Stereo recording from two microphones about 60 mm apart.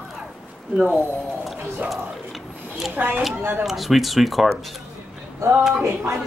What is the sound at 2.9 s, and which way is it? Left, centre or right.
Speech, right.